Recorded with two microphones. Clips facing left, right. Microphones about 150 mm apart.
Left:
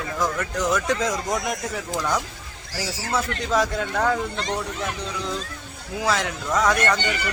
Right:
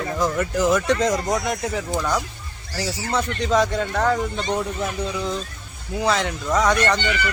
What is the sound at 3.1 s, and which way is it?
Speech, centre (ahead or behind).